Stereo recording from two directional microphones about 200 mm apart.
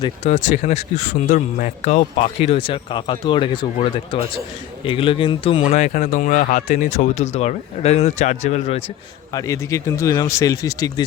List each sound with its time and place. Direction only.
0.0 s speech: 30° left (ahead or behind)
4.9 s speech: 25° left (ahead or behind)
9.3 s speech: 15° left (ahead or behind)